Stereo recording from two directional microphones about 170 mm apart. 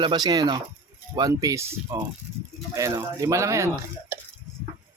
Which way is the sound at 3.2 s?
15° right (ahead or behind).